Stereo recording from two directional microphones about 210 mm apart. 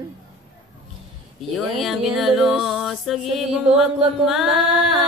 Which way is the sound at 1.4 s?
Centre (ahead or behind).